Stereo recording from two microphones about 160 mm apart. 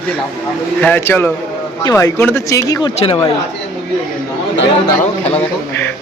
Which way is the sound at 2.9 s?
35° left (ahead or behind).